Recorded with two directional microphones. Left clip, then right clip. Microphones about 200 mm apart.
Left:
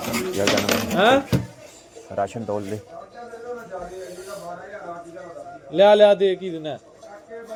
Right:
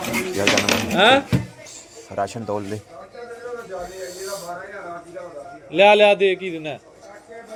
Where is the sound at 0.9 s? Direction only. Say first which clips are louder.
Right 2 dB; 10° left (ahead or behind).